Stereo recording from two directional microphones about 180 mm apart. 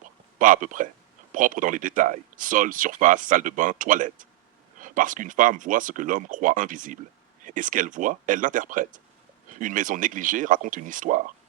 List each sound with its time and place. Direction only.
0.3 s speech: 45° right (ahead or behind)